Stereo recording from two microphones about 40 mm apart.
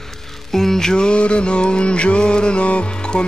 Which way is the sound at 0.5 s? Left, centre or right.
Centre.